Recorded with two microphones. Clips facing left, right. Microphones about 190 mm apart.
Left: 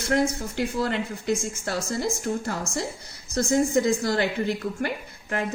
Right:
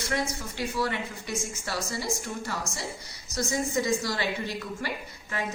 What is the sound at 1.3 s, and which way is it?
A woman's voice, 55° left (ahead or behind).